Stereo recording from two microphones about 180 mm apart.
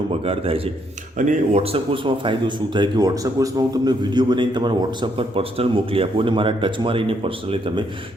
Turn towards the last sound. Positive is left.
turn(degrees=-30)  # may be behind; listen again after turning